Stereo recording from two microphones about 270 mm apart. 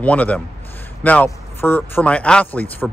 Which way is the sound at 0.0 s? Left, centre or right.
Centre.